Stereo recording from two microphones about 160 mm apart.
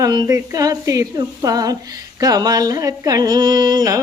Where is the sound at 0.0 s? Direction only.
25° right (ahead or behind).